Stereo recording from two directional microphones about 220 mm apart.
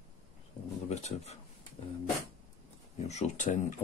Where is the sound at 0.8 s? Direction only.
30° left (ahead or behind).